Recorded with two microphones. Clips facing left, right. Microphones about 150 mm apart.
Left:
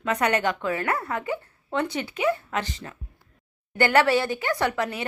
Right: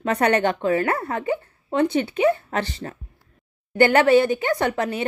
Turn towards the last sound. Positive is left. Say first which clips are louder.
# right 3 dB
turn(degrees=-20)  # may be behind; listen again after turning